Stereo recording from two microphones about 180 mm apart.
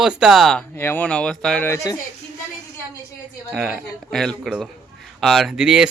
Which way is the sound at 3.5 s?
5° right (ahead or behind).